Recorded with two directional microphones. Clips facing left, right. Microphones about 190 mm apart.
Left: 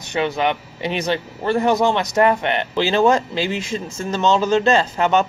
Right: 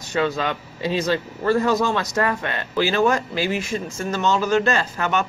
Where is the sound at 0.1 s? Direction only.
20° left (ahead or behind).